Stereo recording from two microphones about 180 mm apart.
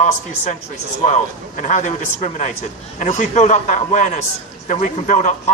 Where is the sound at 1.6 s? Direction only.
40° left (ahead or behind).